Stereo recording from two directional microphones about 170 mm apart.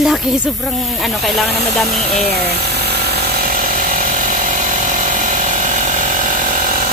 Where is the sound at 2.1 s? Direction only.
65° right (ahead or behind).